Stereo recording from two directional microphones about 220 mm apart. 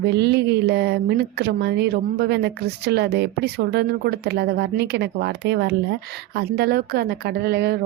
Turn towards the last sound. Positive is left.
turn(degrees=-45)  # may be behind; listen again after turning